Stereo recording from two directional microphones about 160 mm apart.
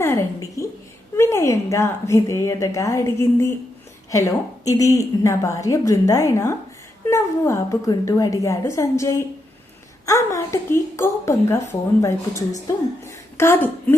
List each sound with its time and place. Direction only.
0.0 s a woman's voice: 15° left (ahead or behind)